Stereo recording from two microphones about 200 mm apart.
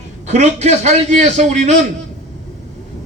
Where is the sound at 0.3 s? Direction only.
35° right (ahead or behind).